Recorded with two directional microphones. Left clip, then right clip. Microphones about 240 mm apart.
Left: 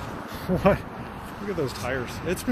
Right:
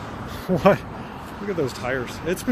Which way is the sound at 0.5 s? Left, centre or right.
Centre.